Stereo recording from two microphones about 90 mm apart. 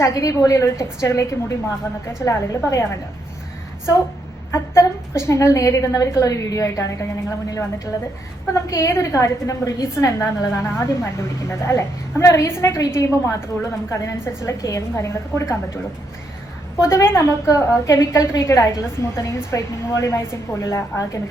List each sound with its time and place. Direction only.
0.0 s a woman's voice: 35° left (ahead or behind)
4.5 s a woman's voice: 30° left (ahead or behind)
16.8 s a woman's voice: 30° left (ahead or behind)